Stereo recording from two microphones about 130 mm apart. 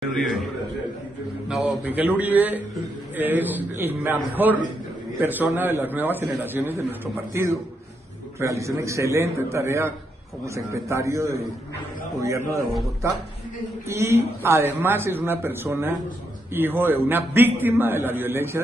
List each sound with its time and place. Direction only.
0.1 s a man's voice: centre (ahead or behind)
1.5 s a man's voice: 10° right (ahead or behind)